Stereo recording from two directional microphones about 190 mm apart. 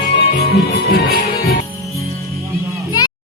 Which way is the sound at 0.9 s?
55° left (ahead or behind).